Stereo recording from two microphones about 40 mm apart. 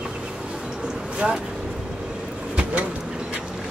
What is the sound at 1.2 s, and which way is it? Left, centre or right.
Gasp, centre.